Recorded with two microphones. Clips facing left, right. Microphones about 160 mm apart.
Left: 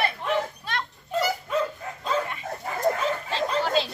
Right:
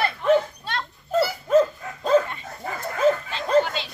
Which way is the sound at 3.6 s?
40° left (ahead or behind).